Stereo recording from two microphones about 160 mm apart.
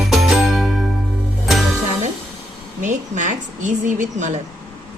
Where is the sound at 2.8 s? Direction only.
50° right (ahead or behind).